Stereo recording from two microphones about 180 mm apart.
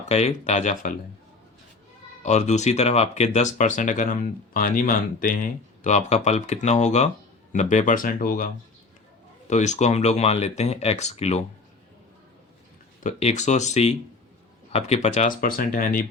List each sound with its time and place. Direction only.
0.1 s speech: 40° left (ahead or behind)
2.2 s speech: 40° left (ahead or behind)
5.8 s speech: 40° left (ahead or behind)
9.5 s speech: 40° left (ahead or behind)
13.0 s speech: 40° left (ahead or behind)